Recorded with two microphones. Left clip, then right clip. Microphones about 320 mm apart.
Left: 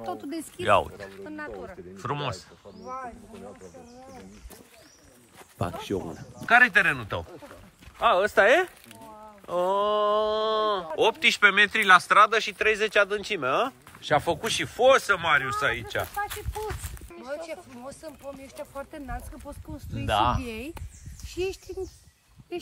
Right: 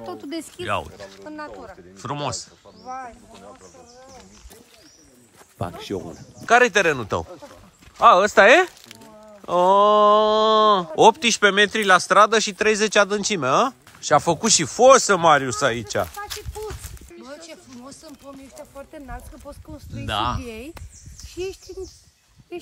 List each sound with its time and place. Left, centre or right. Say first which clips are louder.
0.0 s speech: right 2 dB; centre
1.2 s speech: right 3 dB; centre
2.0 s speech: right 4 dB; centre
5.6 s speech: right 1 dB; centre
17.3 s a sound: left 5 dB; left
18.8 s speech: even; centre
21.3 s a sound: even; centre